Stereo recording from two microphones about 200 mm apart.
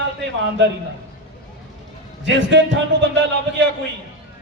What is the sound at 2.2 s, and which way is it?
Speech, 65° right (ahead or behind).